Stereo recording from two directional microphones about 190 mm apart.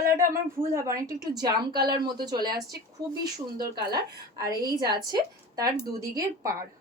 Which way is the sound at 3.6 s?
20° right (ahead or behind).